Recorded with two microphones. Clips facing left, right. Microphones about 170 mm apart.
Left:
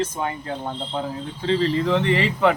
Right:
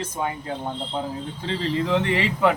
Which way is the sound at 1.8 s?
5° right (ahead or behind).